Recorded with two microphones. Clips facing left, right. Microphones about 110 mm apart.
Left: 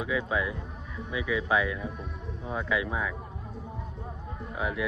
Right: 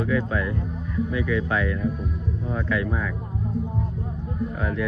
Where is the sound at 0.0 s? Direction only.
10° left (ahead or behind).